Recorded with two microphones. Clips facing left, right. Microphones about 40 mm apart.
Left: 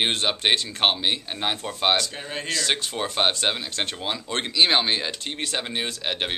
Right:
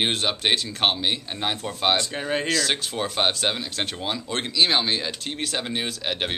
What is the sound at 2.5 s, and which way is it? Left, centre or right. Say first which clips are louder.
Speech: right 1 dB; centre.